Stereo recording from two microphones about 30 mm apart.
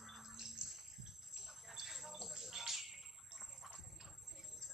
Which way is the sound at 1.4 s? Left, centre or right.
Centre.